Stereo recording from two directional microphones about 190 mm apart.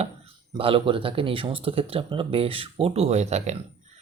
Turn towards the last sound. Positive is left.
turn(degrees=-35)  # may be behind; listen again after turning